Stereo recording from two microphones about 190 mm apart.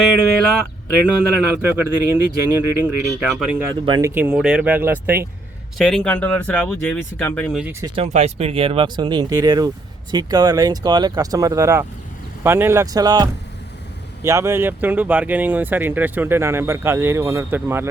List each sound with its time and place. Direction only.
1.4 s speech: 10° right (ahead or behind)
3.8 s speech: 25° right (ahead or behind)
4.1 s speech: 10° right (ahead or behind)
5.7 s speech: centre (ahead or behind)
7.6 s speech: 15° right (ahead or behind)
7.9 s speech: 35° right (ahead or behind); by 17.8 s 10° right (ahead or behind)